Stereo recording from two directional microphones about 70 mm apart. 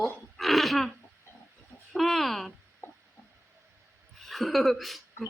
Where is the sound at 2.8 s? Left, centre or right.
Left.